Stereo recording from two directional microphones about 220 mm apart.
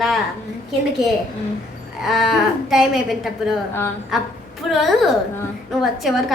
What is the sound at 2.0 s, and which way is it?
A child's voice, centre (ahead or behind).